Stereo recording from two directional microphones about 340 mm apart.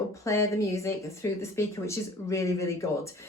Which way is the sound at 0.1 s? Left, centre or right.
Centre.